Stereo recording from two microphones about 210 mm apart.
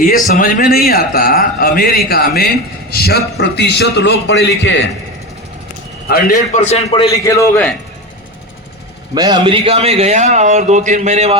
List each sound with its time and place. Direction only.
0.0 s a man's voice: 40° left (ahead or behind); by 4.9 s 55° left (ahead or behind)
6.1 s a man's voice: 45° left (ahead or behind); by 7.1 s 30° left (ahead or behind)
7.1 s a man's voice: 15° left (ahead or behind)
9.1 s a man's voice: 20° right (ahead or behind)